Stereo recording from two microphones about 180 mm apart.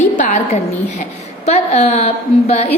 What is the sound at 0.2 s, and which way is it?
Speech, 45° left (ahead or behind).